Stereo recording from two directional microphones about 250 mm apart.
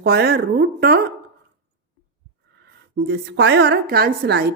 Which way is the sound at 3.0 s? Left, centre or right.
Right.